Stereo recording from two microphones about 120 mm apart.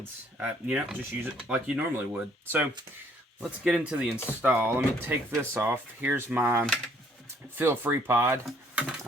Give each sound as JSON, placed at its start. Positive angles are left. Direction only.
{"t": 0.3, "sound": "speech", "side_deg": -10}
{"t": 3.6, "sound": "speech", "side_deg": -5}